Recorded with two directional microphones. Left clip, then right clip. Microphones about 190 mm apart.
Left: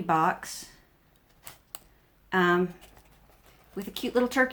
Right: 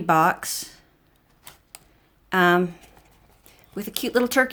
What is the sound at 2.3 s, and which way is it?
Speech, 55° right (ahead or behind).